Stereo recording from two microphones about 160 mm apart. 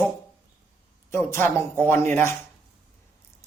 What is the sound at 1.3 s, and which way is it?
Speech, 15° left (ahead or behind).